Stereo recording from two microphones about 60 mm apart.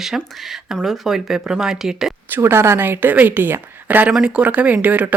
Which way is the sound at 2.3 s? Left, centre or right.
Right.